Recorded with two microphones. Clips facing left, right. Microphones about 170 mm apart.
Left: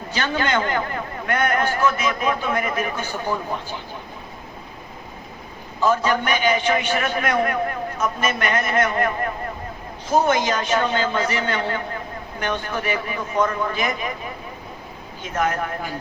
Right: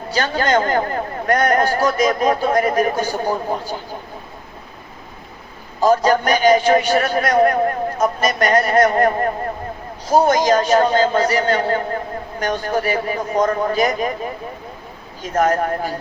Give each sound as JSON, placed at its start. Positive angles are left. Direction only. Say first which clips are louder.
{"t": 0.1, "sound": "a man's voice", "louder": "right 5 dB", "side_deg": -40}
{"t": 5.8, "sound": "a man's voice", "louder": "right 5 dB", "side_deg": -40}
{"t": 15.2, "sound": "a man's voice", "louder": "right 6 dB", "side_deg": -40}